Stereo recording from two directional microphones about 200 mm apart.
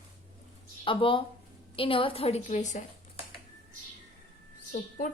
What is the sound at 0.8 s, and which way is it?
A woman's voice, 25° left (ahead or behind).